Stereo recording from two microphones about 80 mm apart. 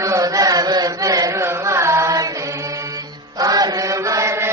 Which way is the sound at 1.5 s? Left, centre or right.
Right.